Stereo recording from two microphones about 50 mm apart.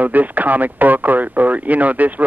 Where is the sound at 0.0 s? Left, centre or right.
Right.